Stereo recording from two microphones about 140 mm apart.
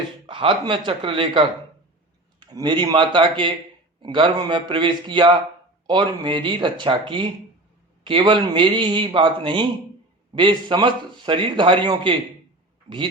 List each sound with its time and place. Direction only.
0.3 s a man's voice: 35° right (ahead or behind)